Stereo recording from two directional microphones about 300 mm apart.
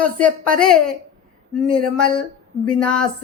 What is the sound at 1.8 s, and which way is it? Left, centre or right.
Speech, left.